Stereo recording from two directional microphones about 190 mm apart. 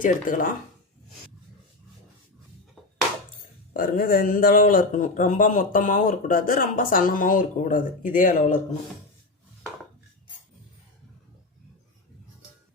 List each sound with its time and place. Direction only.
0.0 s speech: 45° left (ahead or behind)
3.8 s speech: 50° left (ahead or behind)